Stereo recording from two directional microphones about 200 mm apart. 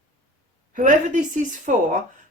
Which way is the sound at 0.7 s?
40° right (ahead or behind).